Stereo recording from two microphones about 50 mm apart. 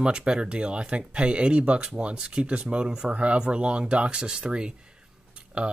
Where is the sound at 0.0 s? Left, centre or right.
Centre.